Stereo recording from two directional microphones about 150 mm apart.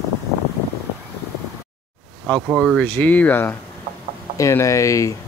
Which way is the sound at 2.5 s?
5° left (ahead or behind).